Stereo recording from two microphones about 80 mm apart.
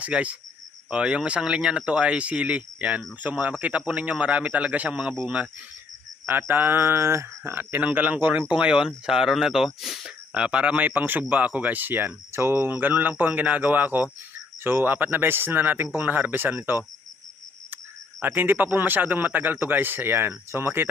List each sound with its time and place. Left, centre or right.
0.0 s speech: centre
6.5 s speech: right; by 10.1 s centre
10.3 s speech: centre
18.2 s speech: right